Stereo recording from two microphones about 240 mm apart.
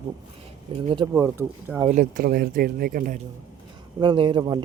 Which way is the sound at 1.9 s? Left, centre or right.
Right.